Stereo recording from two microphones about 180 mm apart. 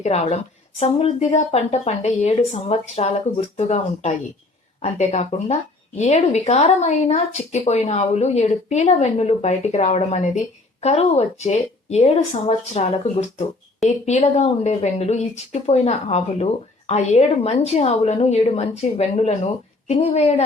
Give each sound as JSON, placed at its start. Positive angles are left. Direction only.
{"t": 0.0, "sound": "speech", "side_deg": 35}